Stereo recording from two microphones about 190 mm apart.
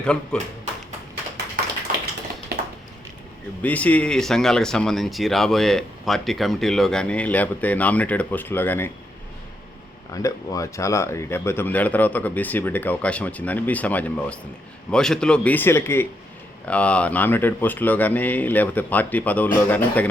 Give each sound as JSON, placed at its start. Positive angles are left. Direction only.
{"t": 0.0, "sound": "speech", "side_deg": 5}
{"t": 1.6, "sound": "tap", "side_deg": -45}
{"t": 2.5, "sound": "a sound", "side_deg": -55}
{"t": 3.6, "sound": "speech", "side_deg": 10}
{"t": 10.1, "sound": "speech", "side_deg": 20}